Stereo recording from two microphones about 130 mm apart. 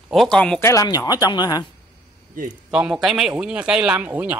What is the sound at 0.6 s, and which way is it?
Speech, 25° left (ahead or behind).